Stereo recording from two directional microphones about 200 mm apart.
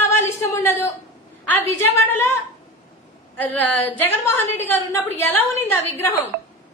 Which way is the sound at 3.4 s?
10° left (ahead or behind).